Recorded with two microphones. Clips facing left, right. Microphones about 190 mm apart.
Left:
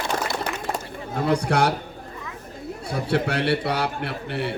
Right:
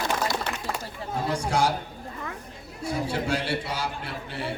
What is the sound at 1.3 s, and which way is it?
Speech, 65° left (ahead or behind).